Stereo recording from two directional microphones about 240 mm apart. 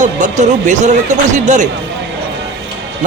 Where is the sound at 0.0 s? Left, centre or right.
Right.